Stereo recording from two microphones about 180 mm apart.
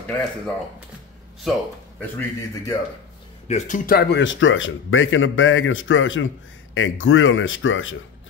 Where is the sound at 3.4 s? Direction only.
40° left (ahead or behind); by 8.0 s 90° left.